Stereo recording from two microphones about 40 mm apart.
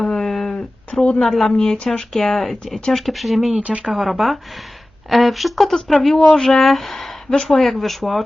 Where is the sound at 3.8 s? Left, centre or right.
Centre.